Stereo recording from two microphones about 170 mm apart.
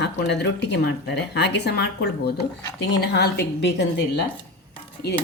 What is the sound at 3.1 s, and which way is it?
Speech, 90° left.